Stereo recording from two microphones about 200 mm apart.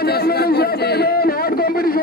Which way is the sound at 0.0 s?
50° left (ahead or behind).